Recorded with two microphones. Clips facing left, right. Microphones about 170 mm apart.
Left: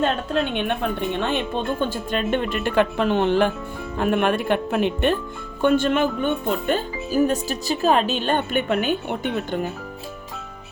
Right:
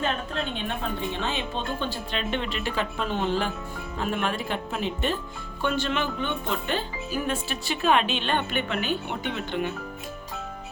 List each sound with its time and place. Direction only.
0.0 s speech: 70° left (ahead or behind)
5.6 s speech: 50° left (ahead or behind)